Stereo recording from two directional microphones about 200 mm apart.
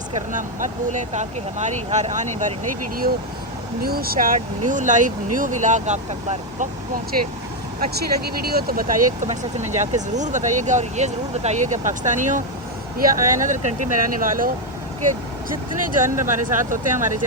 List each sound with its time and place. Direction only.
0.1 s speech: 40° right (ahead or behind)
7.8 s speech: 50° right (ahead or behind)